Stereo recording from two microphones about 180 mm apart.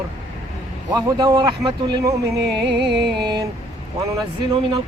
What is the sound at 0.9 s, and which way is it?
A man's voice, 20° right (ahead or behind).